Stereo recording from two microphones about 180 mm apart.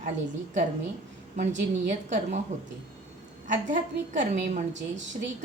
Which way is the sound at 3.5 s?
45° right (ahead or behind).